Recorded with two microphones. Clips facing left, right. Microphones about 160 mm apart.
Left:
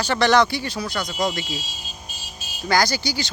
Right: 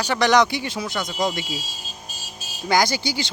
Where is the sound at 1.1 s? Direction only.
Centre (ahead or behind).